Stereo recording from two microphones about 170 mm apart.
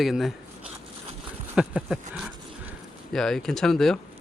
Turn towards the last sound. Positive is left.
turn(degrees=0)  # may be behind; listen again after turning